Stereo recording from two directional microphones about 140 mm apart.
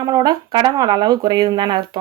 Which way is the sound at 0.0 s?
30° right (ahead or behind).